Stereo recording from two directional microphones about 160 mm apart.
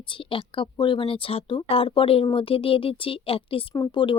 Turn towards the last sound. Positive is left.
turn(degrees=25)  # may be behind; listen again after turning